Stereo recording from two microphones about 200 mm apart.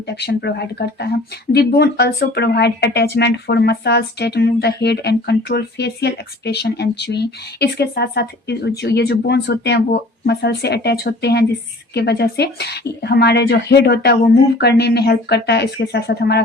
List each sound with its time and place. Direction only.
0.1 s speech: 55° left (ahead or behind)